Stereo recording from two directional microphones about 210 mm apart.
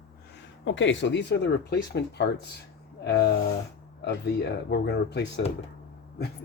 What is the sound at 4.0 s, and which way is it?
Speech, 50° left (ahead or behind).